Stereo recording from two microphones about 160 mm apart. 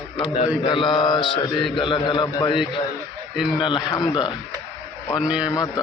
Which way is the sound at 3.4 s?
Centre (ahead or behind).